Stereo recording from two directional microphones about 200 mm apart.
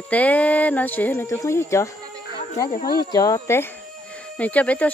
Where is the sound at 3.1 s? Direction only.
15° left (ahead or behind).